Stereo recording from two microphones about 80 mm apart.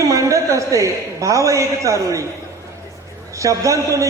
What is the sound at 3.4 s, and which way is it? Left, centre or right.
Speech, right.